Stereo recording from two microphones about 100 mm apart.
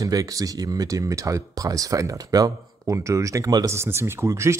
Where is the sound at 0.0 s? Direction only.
35° right (ahead or behind).